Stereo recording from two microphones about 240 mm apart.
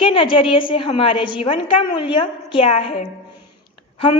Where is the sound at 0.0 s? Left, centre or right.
Left.